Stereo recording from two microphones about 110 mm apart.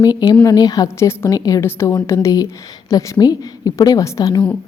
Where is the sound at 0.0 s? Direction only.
35° left (ahead or behind).